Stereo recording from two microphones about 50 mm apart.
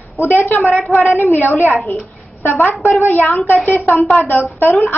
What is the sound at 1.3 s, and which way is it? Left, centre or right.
Speech, left.